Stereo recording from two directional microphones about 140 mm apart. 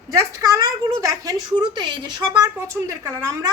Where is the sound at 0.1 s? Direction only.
25° right (ahead or behind).